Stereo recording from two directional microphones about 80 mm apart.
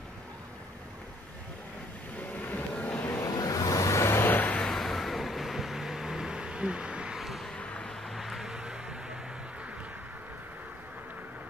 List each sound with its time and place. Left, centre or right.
2.3 s vehicle: left
3.3 s vehicle: left; by 4.6 s centre
4.6 s vehicle: centre
7.5 s vehicle: centre